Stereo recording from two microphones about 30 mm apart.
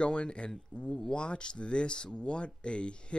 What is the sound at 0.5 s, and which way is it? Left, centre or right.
Speech, centre.